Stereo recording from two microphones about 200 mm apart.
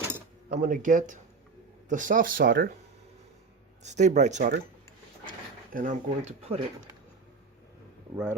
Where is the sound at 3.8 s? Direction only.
35° right (ahead or behind).